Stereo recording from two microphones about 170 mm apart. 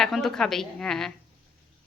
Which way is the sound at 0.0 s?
Centre (ahead or behind).